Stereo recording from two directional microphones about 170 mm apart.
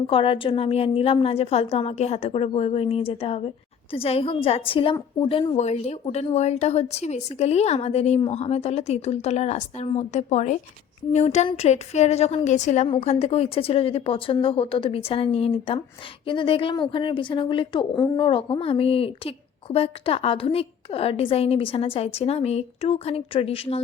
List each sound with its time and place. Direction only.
0.1 s a woman's voice: 30° left (ahead or behind)